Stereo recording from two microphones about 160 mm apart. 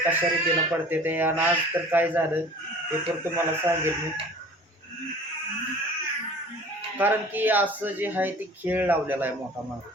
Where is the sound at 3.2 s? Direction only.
15° right (ahead or behind).